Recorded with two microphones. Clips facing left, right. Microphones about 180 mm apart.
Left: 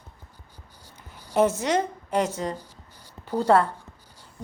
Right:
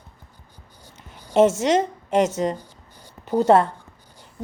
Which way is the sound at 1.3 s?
25° right (ahead or behind).